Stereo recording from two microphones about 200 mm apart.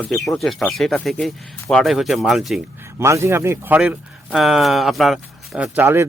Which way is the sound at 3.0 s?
15° right (ahead or behind).